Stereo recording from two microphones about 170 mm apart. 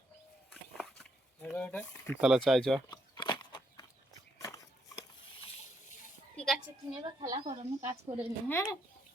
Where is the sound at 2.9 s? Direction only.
25° left (ahead or behind).